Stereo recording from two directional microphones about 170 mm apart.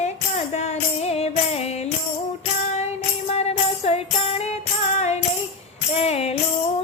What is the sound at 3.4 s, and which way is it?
Music, 40° left (ahead or behind).